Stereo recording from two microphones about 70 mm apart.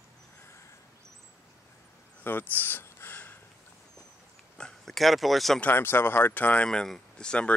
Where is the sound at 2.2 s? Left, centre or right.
Left.